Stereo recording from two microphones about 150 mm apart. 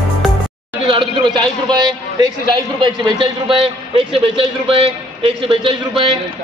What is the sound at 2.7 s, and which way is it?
A man's voice, 30° right (ahead or behind).